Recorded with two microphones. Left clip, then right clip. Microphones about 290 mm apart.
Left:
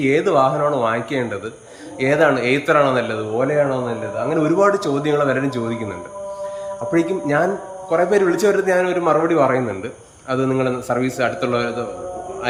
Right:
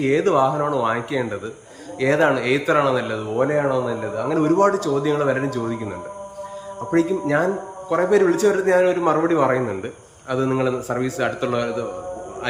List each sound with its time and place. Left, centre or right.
0.0 s speech: centre
6.9 s speech: centre